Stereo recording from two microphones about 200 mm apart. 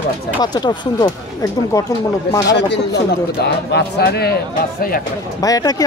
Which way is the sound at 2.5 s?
60° left (ahead or behind).